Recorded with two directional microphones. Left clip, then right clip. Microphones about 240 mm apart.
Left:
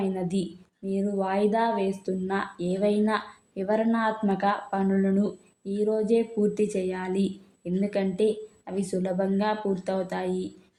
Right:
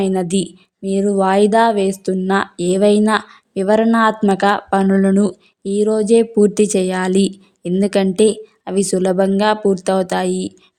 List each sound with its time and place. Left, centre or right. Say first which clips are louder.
0.0 s a woman's voice: right 11 dB; right